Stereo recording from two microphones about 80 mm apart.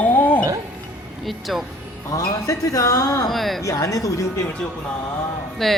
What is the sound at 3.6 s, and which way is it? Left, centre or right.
Speech, left.